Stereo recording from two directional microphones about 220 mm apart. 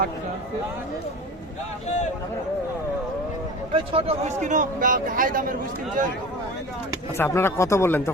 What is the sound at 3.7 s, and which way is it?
A man's voice, 25° right (ahead or behind).